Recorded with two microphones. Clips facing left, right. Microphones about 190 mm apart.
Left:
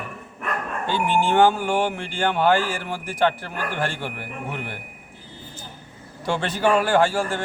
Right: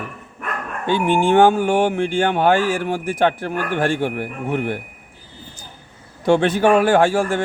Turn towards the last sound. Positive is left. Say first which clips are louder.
# right 4 dB
turn(degrees=-50)  # may be behind; listen again after turning